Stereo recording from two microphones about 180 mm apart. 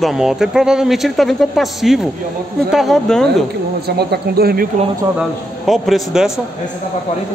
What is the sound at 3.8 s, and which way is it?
Speech, 65° right (ahead or behind).